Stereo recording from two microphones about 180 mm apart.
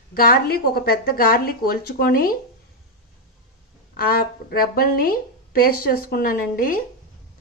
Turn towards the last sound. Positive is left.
turn(degrees=50)  # may be behind; listen again after turning